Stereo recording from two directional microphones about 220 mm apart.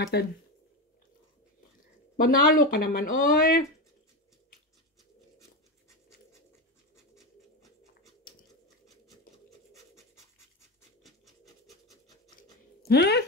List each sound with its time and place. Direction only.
0.0 s speech: 50° left (ahead or behind)
2.1 s speech: 40° left (ahead or behind)
11.1 s rub: centre (ahead or behind)
12.8 s speech: 50° left (ahead or behind)